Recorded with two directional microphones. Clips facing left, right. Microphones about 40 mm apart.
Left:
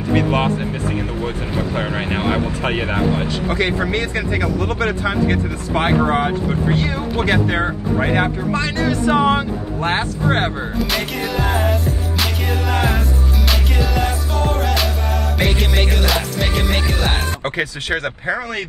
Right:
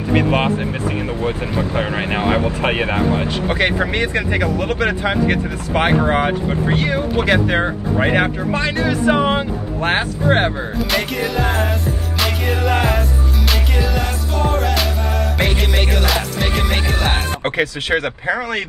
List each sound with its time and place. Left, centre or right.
0.1 s speech: centre
1.8 s speech: right
2.8 s speech: right
3.4 s speech: right
7.4 s speech: centre
9.2 s speech: centre
10.9 s music: centre
17.1 s speech: centre